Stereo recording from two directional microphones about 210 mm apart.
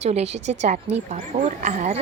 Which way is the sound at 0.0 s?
30° right (ahead or behind).